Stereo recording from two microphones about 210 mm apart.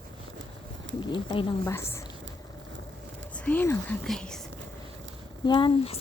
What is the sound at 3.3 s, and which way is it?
Speech, 5° left (ahead or behind).